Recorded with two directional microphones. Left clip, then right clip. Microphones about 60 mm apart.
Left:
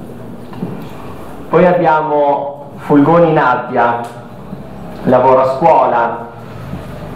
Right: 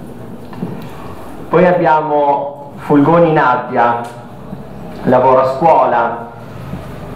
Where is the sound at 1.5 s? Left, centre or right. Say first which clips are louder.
Even; right.